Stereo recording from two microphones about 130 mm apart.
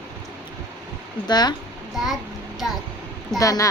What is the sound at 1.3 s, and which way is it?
Speech, 35° left (ahead or behind).